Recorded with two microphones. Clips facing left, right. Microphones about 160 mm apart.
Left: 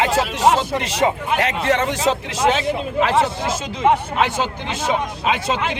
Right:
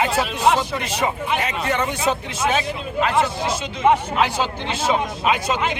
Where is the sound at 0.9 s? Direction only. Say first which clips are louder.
Left 3 dB; 85° left.